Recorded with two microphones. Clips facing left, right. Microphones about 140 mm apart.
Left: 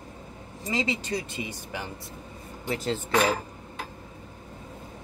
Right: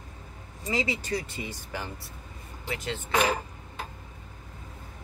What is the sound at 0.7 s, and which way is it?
Speech, 20° left (ahead or behind).